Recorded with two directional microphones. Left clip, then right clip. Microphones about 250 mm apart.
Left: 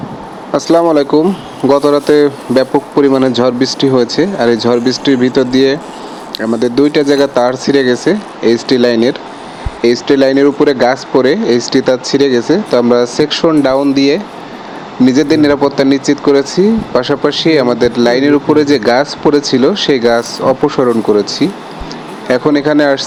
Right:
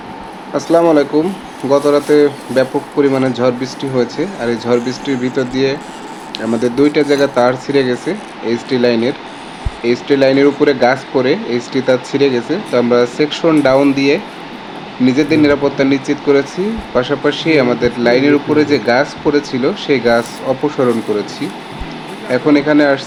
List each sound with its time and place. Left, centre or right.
0.5 s speech: left